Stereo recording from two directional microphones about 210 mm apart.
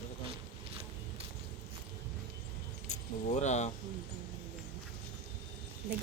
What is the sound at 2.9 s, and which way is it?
Speech, 35° left (ahead or behind).